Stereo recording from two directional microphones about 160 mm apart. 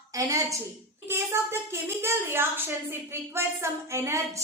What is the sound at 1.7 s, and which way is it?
A woman's voice, 15° right (ahead or behind).